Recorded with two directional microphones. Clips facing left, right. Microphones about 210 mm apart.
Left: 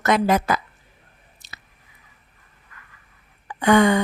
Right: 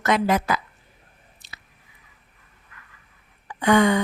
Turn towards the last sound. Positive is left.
turn(degrees=50)  # may be behind; listen again after turning